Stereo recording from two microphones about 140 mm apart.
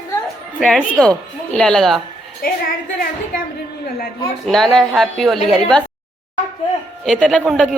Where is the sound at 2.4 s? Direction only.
90° left.